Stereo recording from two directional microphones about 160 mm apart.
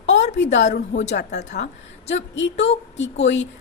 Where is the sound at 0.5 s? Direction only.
90° left.